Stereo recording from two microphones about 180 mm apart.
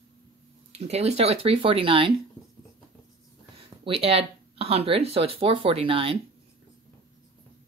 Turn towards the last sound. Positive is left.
turn(degrees=-30)  # may be behind; listen again after turning